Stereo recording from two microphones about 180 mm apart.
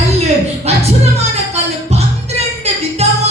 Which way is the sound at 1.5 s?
35° right (ahead or behind).